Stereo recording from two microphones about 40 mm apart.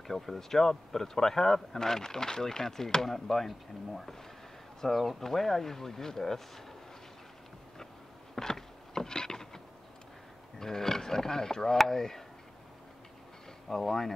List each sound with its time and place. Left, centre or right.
0.0 s speech: centre
8.4 s a sound: centre
10.6 s speech: centre
13.7 s speech: centre